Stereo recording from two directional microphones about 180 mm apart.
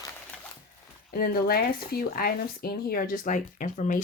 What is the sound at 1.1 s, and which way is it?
Speech, 55° left (ahead or behind).